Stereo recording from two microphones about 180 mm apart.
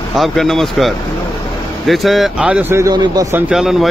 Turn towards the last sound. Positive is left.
turn(degrees=0)  # may be behind; listen again after turning